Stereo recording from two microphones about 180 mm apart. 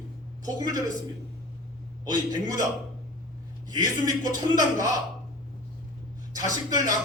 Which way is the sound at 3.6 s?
20° right (ahead or behind).